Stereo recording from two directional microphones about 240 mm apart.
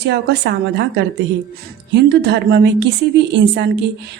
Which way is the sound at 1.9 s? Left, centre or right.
Right.